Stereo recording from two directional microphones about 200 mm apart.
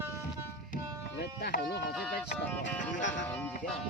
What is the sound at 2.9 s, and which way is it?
Music, 65° left (ahead or behind).